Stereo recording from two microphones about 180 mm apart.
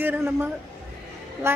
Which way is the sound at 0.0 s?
10° right (ahead or behind).